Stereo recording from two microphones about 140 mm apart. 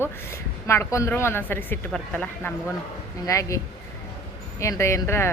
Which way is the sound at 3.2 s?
25° left (ahead or behind).